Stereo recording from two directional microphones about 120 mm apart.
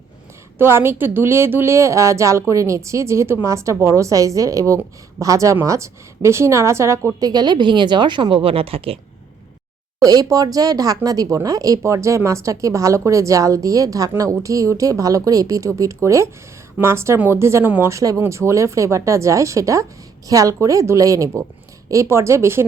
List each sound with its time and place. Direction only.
0.6 s a woman's voice: 20° right (ahead or behind); by 9.0 s 50° right (ahead or behind)
10.0 s a woman's voice: 30° right (ahead or behind)